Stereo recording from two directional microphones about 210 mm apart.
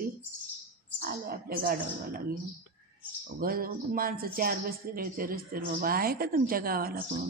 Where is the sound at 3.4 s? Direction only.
45° right (ahead or behind).